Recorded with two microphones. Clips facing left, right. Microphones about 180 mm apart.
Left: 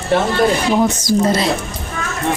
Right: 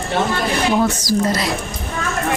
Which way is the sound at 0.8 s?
20° left (ahead or behind).